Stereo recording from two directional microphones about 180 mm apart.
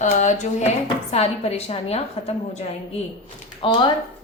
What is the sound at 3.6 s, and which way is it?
Speech, 25° left (ahead or behind).